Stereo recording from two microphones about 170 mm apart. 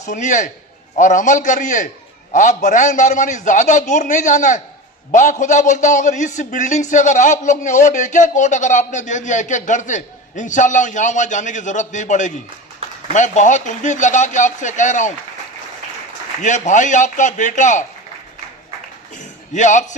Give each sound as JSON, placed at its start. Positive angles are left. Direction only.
{"t": 0.0, "sound": "a man's voice", "side_deg": 45}
{"t": 16.4, "sound": "a man's voice", "side_deg": 45}
{"t": 19.5, "sound": "a man's voice", "side_deg": 45}